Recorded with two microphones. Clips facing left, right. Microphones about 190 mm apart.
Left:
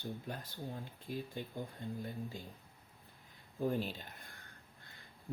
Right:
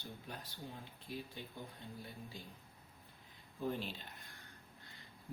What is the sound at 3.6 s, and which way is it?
Speech, 45° left (ahead or behind).